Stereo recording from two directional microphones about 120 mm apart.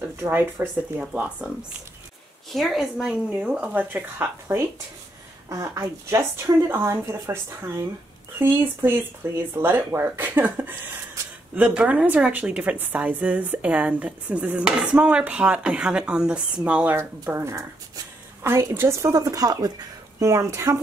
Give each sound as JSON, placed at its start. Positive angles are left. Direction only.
{"t": 0.2, "sound": "a woman's voice", "side_deg": -20}
{"t": 2.5, "sound": "a woman's voice", "side_deg": 0}
{"t": 16.9, "sound": "speech", "side_deg": -20}